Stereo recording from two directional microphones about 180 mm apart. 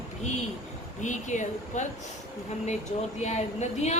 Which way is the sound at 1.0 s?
40° left (ahead or behind).